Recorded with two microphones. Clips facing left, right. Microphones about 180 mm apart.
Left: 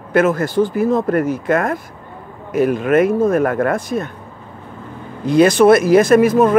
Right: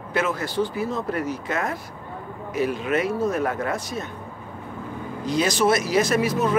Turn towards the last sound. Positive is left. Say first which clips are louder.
# left 10 dB
turn(degrees=50)  # may be behind; listen again after turning